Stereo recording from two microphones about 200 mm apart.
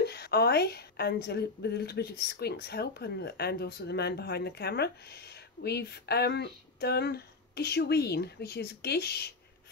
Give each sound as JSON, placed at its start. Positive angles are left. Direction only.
{"t": 0.0, "sound": "a woman's voice", "side_deg": 55}